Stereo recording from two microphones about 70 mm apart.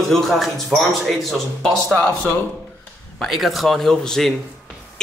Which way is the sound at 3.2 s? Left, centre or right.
Centre.